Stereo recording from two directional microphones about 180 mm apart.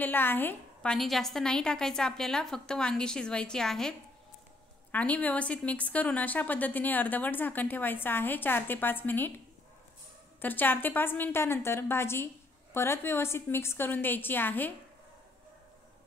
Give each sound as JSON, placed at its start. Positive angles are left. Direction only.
{"t": 0.0, "sound": "a woman's voice", "side_deg": 10}
{"t": 0.9, "sound": "a woman's voice", "side_deg": 0}
{"t": 4.9, "sound": "a woman's voice", "side_deg": 10}
{"t": 10.4, "sound": "a woman's voice", "side_deg": 10}